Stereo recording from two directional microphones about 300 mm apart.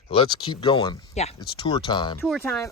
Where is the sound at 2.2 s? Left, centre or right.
Centre.